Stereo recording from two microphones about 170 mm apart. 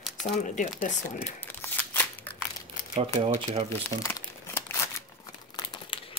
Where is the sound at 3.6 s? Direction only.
15° left (ahead or behind).